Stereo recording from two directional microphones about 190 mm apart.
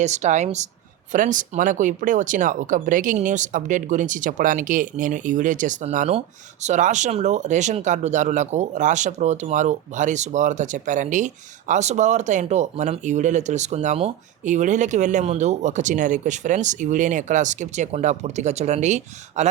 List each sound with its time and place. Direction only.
0.0 s speech: 40° right (ahead or behind)